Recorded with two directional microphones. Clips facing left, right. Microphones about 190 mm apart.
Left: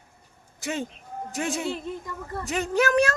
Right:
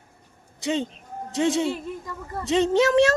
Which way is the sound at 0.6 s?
20° right (ahead or behind).